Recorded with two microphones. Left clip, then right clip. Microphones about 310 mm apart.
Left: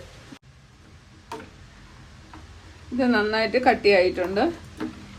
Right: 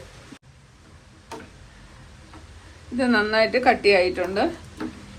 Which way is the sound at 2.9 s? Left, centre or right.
Right.